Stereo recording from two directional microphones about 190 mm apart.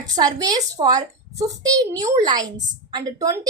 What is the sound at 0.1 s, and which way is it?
A woman's voice, 20° right (ahead or behind).